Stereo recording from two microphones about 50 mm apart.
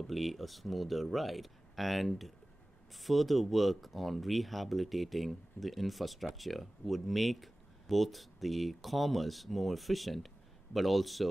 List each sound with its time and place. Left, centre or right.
0.0 s speech: centre